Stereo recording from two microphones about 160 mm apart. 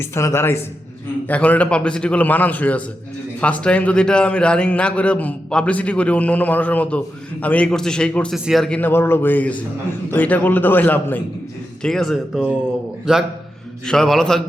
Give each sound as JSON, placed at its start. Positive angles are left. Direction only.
{"t": 0.0, "sound": "a man's voice", "side_deg": 15}